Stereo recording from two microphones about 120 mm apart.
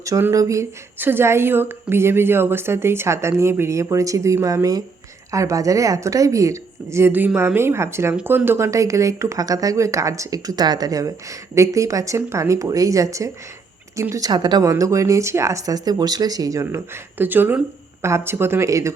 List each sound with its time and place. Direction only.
0.0 s speech: 25° right (ahead or behind)